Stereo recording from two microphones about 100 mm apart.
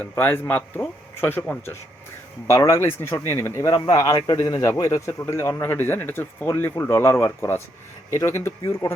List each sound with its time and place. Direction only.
0.0 s speech: 20° left (ahead or behind); by 8.9 s 35° left (ahead or behind)